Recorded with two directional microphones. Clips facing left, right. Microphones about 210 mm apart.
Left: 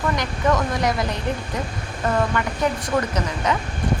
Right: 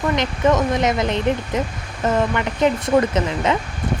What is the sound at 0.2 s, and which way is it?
Speech, 20° right (ahead or behind).